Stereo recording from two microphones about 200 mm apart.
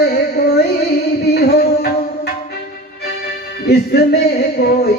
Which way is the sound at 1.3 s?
55° left (ahead or behind).